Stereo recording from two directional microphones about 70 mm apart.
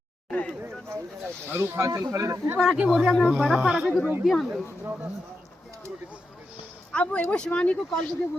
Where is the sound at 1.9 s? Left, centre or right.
Right.